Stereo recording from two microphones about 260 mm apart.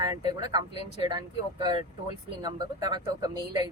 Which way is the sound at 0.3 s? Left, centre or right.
Centre.